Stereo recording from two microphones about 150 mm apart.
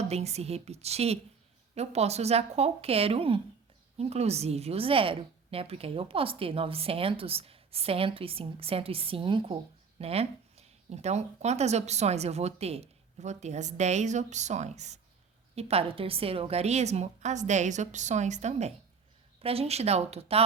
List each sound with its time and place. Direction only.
0.1 s a woman's voice: 45° right (ahead or behind)